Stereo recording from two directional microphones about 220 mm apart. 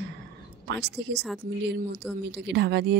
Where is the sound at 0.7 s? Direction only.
50° right (ahead or behind).